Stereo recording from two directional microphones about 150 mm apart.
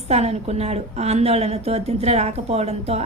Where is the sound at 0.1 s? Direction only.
45° right (ahead or behind).